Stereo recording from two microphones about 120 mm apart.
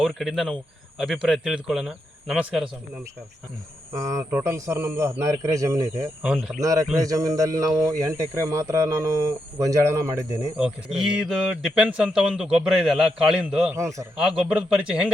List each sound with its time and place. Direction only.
0.0 s speech: centre (ahead or behind)
3.9 s speech: 25° right (ahead or behind)
6.2 s speech: 5° right (ahead or behind)
6.6 s speech: 30° right (ahead or behind)
10.9 s speech: 5° right (ahead or behind)
13.7 s speech: 25° right (ahead or behind)
14.5 s speech: 10° right (ahead or behind)